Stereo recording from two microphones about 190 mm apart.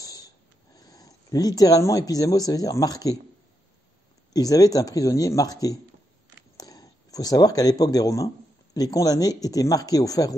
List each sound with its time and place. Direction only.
0.0 s a sound: 20° left (ahead or behind)
0.7 s speech: 20° left (ahead or behind)
4.3 s speech: 20° left (ahead or behind)